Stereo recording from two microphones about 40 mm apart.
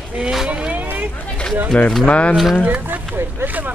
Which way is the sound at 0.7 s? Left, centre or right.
Right.